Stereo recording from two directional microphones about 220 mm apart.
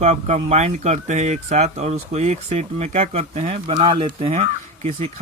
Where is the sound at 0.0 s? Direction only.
30° right (ahead or behind).